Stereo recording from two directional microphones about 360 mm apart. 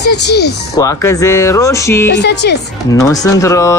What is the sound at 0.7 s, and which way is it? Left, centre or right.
Speech, centre.